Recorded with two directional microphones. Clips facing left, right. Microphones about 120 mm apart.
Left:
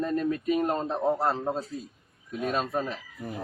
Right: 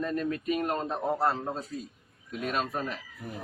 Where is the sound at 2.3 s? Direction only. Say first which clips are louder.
Left 2 dB; 25° left (ahead or behind).